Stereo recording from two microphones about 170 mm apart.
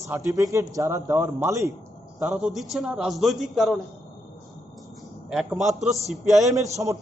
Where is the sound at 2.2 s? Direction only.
5° right (ahead or behind).